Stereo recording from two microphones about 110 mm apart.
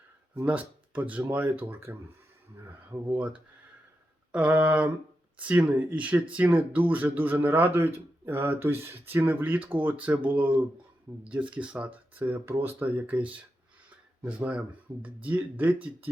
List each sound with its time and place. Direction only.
0.4 s speech: 15° right (ahead or behind)
3.1 s speech: 10° right (ahead or behind)